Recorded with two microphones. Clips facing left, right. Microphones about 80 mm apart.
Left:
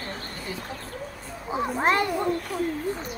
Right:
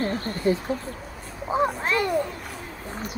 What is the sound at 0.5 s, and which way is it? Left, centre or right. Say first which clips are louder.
Speech: right 15 dB; right.